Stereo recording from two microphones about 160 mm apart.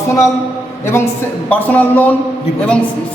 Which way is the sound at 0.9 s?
15° left (ahead or behind).